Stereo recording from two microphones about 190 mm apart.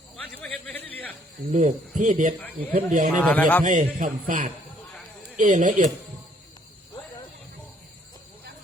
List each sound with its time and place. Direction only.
0.2 s a sound: 10° left (ahead or behind)
1.5 s a man's voice: 40° right (ahead or behind)
3.2 s speech: 5° left (ahead or behind)
3.6 s a man's voice: 45° right (ahead or behind)